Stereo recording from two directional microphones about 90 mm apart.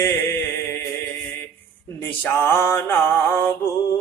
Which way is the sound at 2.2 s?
25° left (ahead or behind).